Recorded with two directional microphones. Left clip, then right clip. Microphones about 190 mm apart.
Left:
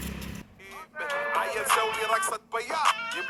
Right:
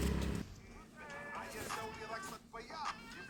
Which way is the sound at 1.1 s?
60° left (ahead or behind).